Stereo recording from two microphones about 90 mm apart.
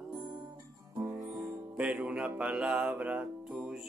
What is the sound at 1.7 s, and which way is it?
Music, 10° right (ahead or behind).